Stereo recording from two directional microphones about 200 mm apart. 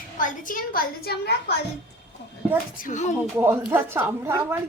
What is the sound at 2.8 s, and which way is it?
Speech, 40° left (ahead or behind).